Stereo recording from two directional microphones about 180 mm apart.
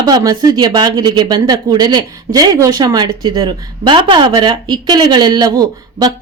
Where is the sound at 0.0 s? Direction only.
20° right (ahead or behind).